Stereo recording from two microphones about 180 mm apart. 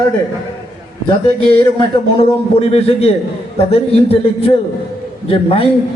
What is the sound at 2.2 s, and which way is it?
A man's voice, 35° left (ahead or behind).